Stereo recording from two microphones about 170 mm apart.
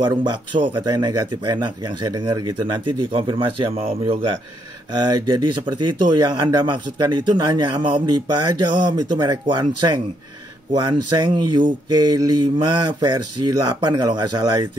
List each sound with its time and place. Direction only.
0.0 s speech: 25° right (ahead or behind)